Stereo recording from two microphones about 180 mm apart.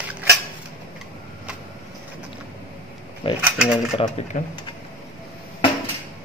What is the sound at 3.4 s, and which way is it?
Mechanisms, 5° right (ahead or behind).